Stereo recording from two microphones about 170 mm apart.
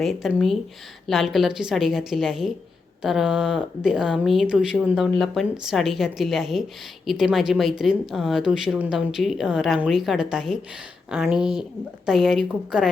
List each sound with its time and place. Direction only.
0.0 s speech: centre (ahead or behind)